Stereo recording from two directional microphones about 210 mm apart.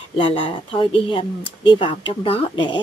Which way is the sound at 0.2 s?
25° left (ahead or behind).